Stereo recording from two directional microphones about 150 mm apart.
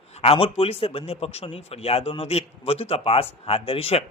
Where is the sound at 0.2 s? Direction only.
40° left (ahead or behind).